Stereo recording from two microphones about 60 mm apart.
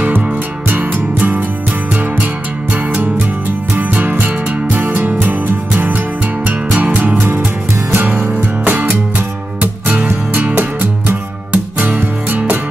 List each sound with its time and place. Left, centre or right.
0.7 s music: right
2.7 s music: right